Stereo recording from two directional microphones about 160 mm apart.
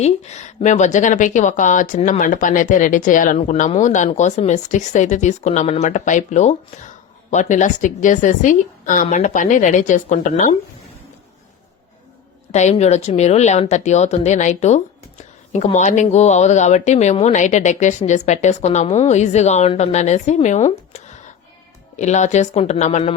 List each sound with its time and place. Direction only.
0.0 s speech: 45° left (ahead or behind)
3.3 s speech: 45° left (ahead or behind)
12.5 s speech: 45° left (ahead or behind)